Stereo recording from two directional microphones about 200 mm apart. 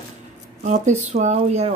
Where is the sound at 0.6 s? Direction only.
35° right (ahead or behind).